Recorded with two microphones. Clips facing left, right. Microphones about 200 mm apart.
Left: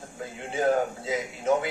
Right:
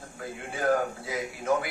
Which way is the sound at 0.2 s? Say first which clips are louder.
Left 4 dB; 20° left (ahead or behind).